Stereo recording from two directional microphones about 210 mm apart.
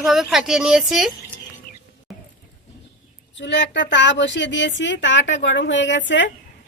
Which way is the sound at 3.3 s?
60° left (ahead or behind).